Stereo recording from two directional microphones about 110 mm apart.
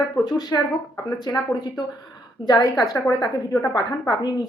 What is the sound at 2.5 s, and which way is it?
Speech, 35° left (ahead or behind).